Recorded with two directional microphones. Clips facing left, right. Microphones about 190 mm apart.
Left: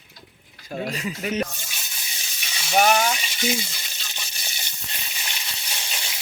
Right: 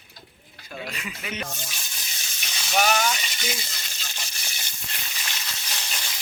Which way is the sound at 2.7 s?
50° left (ahead or behind).